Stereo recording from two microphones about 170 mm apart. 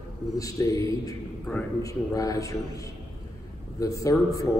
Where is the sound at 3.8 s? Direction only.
20° left (ahead or behind).